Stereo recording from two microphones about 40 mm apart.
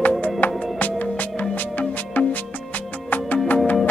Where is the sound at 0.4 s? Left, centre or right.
Left.